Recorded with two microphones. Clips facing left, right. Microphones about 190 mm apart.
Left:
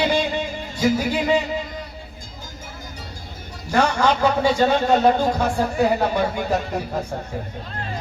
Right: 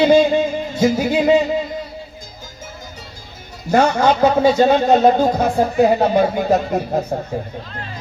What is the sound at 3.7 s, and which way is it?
Speech, 45° right (ahead or behind).